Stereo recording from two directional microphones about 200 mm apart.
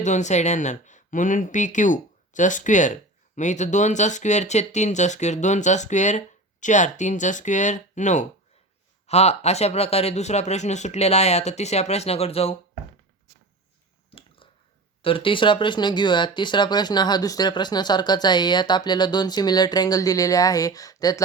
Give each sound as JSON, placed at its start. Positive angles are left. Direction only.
{"t": 0.0, "sound": "speech", "side_deg": 35}
{"t": 14.1, "sound": "a sound", "side_deg": 30}
{"t": 15.0, "sound": "speech", "side_deg": 25}